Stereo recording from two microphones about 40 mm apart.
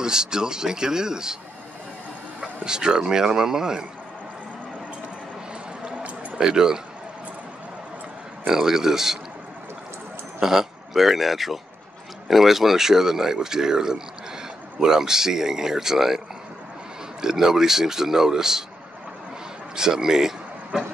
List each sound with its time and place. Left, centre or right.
0.0 s speech: centre
2.6 s speech: centre
6.3 s speech: centre
8.5 s speech: centre
10.4 s speech: centre
17.2 s speech: centre
19.7 s speech: centre